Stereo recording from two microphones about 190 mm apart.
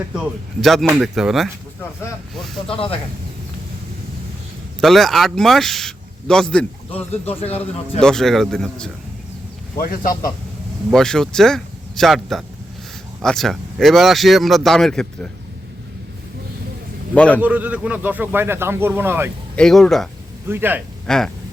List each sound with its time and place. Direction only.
0.1 s a man's voice: centre (ahead or behind)
2.6 s speech: 30° left (ahead or behind)
4.8 s a man's voice: centre (ahead or behind)
6.9 s speech: 30° left (ahead or behind)
8.0 s a man's voice: centre (ahead or behind)
9.7 s speech: 50° left (ahead or behind)
10.9 s a man's voice: 5° left (ahead or behind)
17.2 s a man's voice: 5° left (ahead or behind)
17.4 s speech: 10° right (ahead or behind)
19.5 s a man's voice: 5° left (ahead or behind)
20.5 s speech: 10° right (ahead or behind)
21.1 s a man's voice: 5° left (ahead or behind)